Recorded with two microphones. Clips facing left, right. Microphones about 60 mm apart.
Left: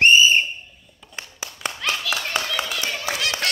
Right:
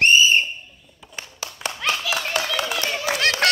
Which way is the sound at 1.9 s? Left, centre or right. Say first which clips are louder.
Right 2 dB; centre.